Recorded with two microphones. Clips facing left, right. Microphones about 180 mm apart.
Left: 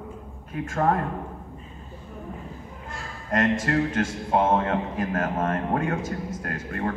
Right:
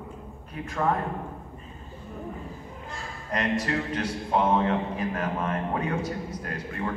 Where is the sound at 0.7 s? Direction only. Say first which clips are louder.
Left 3 dB; 45° left (ahead or behind).